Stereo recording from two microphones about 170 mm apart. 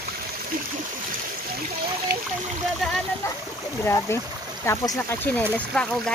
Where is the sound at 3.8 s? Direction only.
15° left (ahead or behind).